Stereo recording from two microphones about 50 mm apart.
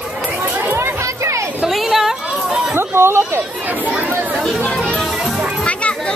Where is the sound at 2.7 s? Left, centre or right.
Right.